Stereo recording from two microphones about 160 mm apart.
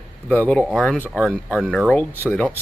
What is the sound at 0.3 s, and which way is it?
Speech, 10° left (ahead or behind).